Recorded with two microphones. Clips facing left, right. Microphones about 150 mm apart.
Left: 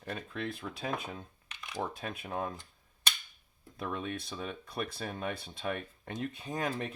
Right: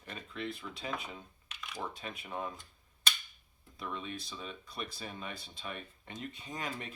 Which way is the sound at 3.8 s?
55° left (ahead or behind).